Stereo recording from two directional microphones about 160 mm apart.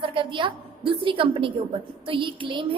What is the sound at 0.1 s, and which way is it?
A woman's voice, 30° right (ahead or behind).